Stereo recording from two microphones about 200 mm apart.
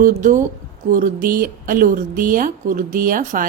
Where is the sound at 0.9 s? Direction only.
40° right (ahead or behind).